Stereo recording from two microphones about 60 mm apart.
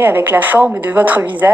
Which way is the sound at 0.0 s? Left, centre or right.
Right.